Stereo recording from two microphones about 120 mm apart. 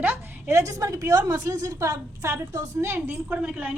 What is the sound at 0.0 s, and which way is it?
A woman's voice, 25° right (ahead or behind).